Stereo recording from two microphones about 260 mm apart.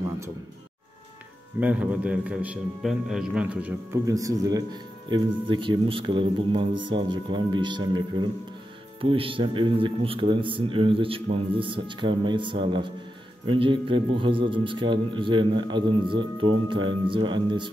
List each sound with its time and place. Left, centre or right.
1.6 s a man's voice: centre